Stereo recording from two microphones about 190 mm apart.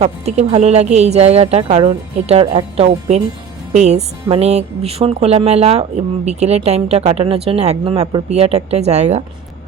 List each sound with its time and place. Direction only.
0.0 s speech: 35° right (ahead or behind)